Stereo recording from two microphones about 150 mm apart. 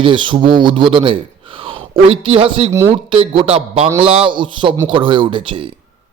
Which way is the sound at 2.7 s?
20° right (ahead or behind).